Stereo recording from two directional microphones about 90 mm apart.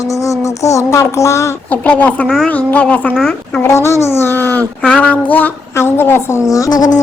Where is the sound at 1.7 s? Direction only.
15° left (ahead or behind).